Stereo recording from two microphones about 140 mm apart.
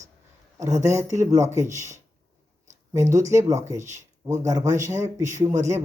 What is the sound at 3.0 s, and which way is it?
Speech, 20° right (ahead or behind).